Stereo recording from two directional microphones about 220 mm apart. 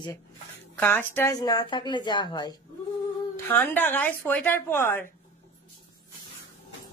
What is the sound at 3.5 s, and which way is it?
A woman's voice, 10° left (ahead or behind).